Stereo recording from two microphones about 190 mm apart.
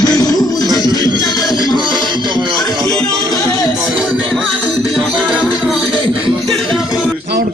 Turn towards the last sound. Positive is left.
turn(degrees=0)  # may be behind; listen again after turning